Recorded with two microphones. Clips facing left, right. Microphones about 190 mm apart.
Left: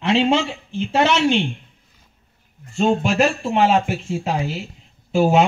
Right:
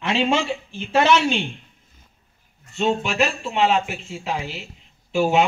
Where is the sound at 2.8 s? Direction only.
45° left (ahead or behind).